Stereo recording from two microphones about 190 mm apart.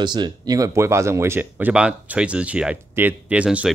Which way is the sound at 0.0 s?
25° right (ahead or behind).